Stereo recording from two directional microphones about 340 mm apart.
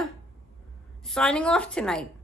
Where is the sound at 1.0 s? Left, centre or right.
Centre.